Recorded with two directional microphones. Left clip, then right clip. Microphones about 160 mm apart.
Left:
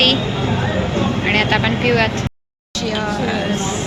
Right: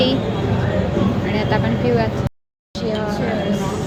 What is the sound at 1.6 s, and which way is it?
Speech, 15° right (ahead or behind).